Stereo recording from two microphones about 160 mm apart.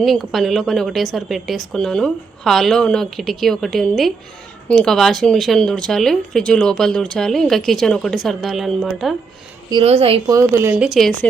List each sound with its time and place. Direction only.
0.0 s speech: centre (ahead or behind)
9.8 s a woman's voice: 40° right (ahead or behind)
10.2 s a woman's voice: 20° right (ahead or behind)
10.8 s speech: centre (ahead or behind)